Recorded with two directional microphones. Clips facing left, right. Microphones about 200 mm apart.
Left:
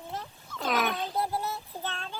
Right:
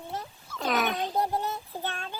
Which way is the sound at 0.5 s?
Centre (ahead or behind).